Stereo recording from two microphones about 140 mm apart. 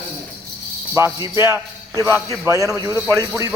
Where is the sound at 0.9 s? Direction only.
15° right (ahead or behind).